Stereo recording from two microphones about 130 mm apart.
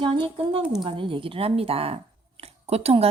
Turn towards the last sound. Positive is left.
turn(degrees=-50)  # may be behind; listen again after turning